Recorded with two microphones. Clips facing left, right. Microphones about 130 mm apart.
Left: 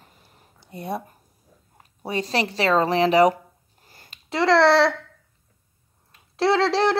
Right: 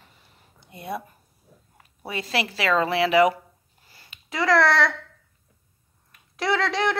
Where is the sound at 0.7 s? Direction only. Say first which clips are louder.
Left 3 dB; 35° left (ahead or behind).